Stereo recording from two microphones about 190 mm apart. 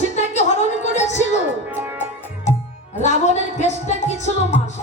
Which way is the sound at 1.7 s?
10° right (ahead or behind).